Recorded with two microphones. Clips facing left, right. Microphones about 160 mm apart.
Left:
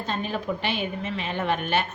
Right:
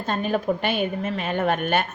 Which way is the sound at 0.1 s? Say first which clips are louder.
Right 6 dB; 50° right (ahead or behind).